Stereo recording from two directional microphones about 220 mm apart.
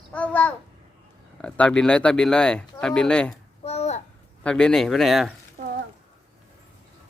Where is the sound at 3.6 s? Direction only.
30° left (ahead or behind).